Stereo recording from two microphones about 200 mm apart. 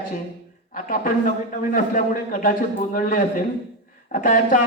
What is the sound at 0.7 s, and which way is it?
A man's voice, 45° left (ahead or behind).